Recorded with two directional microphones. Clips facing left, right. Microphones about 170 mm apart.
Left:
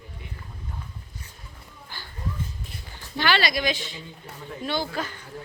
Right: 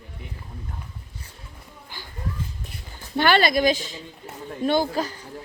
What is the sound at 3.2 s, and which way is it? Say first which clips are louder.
A woman's voice: right 5 dB; 50° right (ahead or behind).